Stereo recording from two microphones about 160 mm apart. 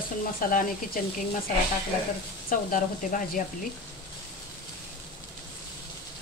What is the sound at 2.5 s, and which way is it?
Speech, 60° left (ahead or behind).